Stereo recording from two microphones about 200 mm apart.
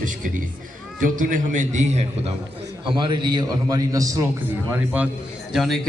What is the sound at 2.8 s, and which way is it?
A man's voice, 25° right (ahead or behind).